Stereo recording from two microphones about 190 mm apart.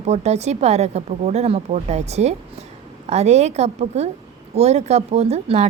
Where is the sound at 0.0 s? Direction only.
35° right (ahead or behind).